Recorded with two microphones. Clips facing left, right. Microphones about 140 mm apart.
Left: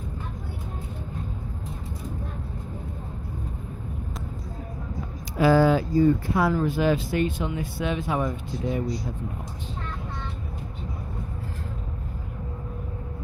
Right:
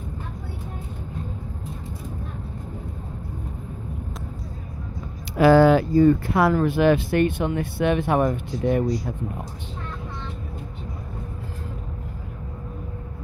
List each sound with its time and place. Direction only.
5.4 s speech: 70° right (ahead or behind)